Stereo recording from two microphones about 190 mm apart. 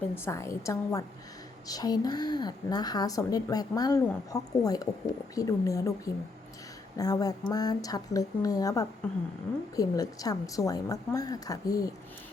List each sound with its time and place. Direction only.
0.1 s a woman's voice: 15° left (ahead or behind)
6.9 s a woman's voice: 20° left (ahead or behind)